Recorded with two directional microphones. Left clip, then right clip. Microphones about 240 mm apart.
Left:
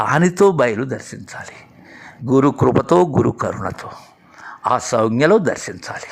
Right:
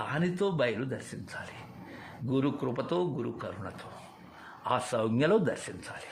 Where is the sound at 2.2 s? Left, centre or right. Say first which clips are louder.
Left 17 dB; left.